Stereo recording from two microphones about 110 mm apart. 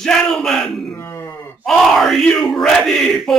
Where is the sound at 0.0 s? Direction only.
5° left (ahead or behind).